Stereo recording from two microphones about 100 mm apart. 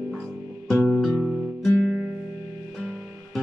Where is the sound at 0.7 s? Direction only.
5° left (ahead or behind).